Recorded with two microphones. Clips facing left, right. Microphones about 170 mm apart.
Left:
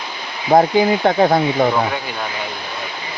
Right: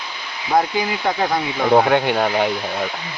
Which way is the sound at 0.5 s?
45° left (ahead or behind).